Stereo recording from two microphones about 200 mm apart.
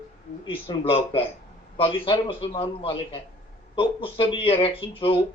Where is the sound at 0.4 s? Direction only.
25° left (ahead or behind).